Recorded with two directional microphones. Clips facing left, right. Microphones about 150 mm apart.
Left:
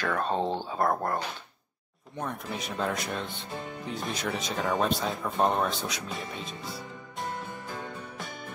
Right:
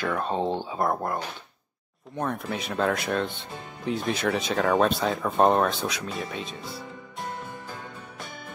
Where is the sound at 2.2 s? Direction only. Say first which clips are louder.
Right 5 dB; 60° right (ahead or behind).